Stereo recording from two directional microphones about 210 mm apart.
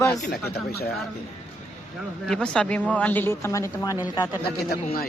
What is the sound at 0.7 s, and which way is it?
Speech, 50° left (ahead or behind).